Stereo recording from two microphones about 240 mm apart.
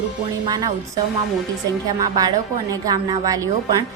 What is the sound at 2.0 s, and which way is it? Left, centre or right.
A woman's voice, centre.